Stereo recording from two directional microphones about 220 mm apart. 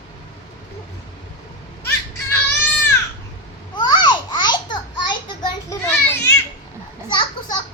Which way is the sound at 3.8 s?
20° left (ahead or behind).